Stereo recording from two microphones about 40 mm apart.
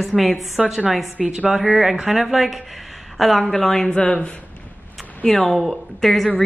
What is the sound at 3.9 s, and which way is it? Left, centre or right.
Speech, left.